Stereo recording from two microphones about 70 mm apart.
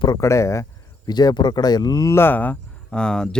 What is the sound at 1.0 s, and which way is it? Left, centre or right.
Speech, left.